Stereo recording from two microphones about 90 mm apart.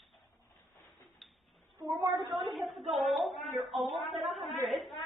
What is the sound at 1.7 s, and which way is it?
Speech, 40° right (ahead or behind).